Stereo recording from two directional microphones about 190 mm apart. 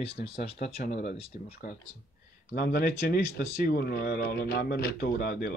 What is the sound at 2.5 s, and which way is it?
Speech, 55° left (ahead or behind).